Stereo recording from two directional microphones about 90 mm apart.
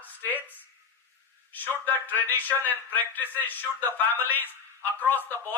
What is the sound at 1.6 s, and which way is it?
A man's voice, 20° left (ahead or behind).